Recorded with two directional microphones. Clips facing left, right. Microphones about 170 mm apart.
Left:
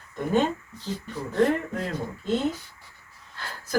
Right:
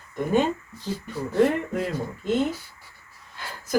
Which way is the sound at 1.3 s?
10° right (ahead or behind).